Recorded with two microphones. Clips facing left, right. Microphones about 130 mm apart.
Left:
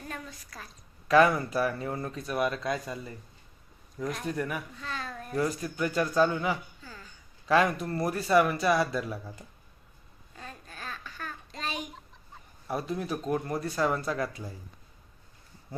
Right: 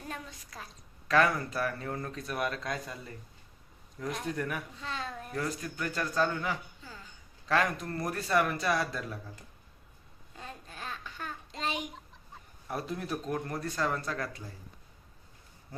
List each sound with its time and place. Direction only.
0.1 s a woman's voice: 20° right (ahead or behind)
1.0 s speech: 10° left (ahead or behind)
4.3 s speech: 5° left (ahead or behind)
4.8 s a woman's voice: 25° right (ahead or behind)
5.3 s speech: 10° left (ahead or behind)
10.3 s babbling: 20° right (ahead or behind)
11.9 s speech: centre (ahead or behind)